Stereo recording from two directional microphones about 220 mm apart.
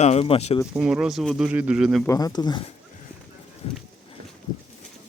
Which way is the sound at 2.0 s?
15° left (ahead or behind).